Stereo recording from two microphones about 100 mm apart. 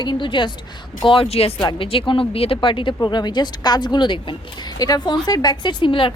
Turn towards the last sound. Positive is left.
turn(degrees=60)  # may be behind; listen again after turning